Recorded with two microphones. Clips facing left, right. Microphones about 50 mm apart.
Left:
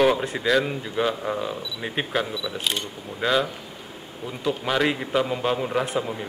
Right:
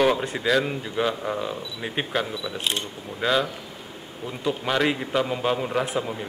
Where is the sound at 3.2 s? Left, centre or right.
Centre.